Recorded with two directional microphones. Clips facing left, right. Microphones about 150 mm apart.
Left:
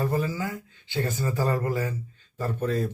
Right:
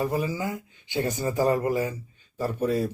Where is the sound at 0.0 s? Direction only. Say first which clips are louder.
Even; 15° right (ahead or behind).